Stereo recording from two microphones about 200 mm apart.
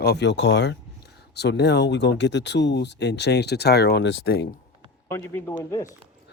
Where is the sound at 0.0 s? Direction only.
55° left (ahead or behind).